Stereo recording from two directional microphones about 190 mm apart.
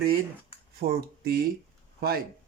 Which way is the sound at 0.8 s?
50° right (ahead or behind).